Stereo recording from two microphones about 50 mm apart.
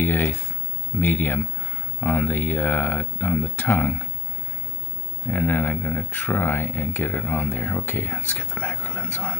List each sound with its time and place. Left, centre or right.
0.0 s speech: left
5.2 s speech: left